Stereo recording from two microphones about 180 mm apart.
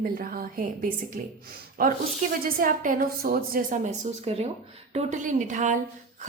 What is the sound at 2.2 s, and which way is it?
A woman's voice, 45° right (ahead or behind).